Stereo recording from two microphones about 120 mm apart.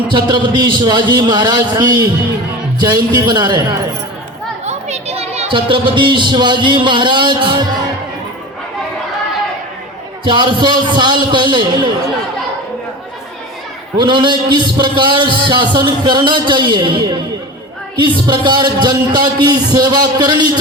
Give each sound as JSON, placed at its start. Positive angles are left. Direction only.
{"t": 0.1, "sound": "a man's voice", "side_deg": -35}
{"t": 4.6, "sound": "a sound", "side_deg": -65}
{"t": 5.5, "sound": "a man's voice", "side_deg": -45}
{"t": 10.2, "sound": "a man's voice", "side_deg": -40}
{"t": 14.0, "sound": "a man's voice", "side_deg": -40}